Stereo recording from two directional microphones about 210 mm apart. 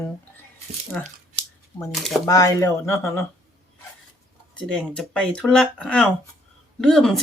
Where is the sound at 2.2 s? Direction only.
15° left (ahead or behind).